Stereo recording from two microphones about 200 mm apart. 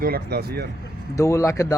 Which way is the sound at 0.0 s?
50° right (ahead or behind).